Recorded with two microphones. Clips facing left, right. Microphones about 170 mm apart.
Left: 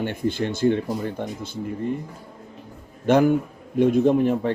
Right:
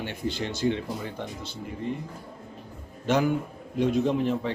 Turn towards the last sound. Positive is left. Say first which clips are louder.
# left 6 dB
turn(degrees=50)  # may be behind; listen again after turning